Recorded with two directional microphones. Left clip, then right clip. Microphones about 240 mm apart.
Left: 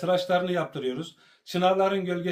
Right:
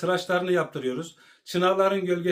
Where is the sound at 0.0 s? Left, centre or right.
Centre.